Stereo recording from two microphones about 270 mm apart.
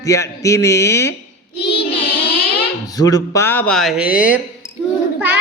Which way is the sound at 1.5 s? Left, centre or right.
Left.